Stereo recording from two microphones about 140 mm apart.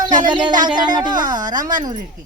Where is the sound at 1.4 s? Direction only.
70° right (ahead or behind).